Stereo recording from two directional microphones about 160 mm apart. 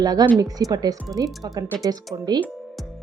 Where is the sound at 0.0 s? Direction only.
25° right (ahead or behind).